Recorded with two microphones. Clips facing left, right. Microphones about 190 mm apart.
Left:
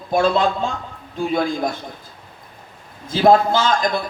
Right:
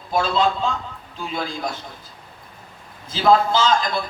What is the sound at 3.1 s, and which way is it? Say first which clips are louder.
Speech: left 3 dB; 55° left (ahead or behind).